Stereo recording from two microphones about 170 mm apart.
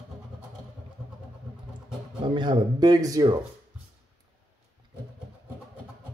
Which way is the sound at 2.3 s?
25° right (ahead or behind).